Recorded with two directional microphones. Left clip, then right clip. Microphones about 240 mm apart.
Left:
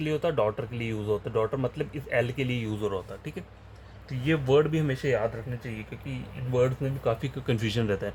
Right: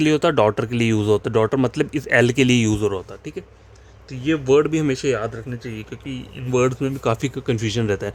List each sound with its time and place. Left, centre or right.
0.0 s speech: right
2.8 s speech: right
6.5 s speech: right
7.4 s speech: right